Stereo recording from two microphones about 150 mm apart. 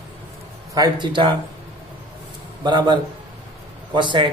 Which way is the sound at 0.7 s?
25° right (ahead or behind).